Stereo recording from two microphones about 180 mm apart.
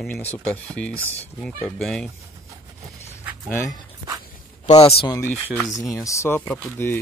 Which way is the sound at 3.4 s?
15° left (ahead or behind).